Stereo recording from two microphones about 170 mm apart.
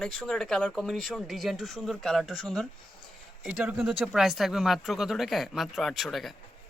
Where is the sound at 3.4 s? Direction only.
5° right (ahead or behind).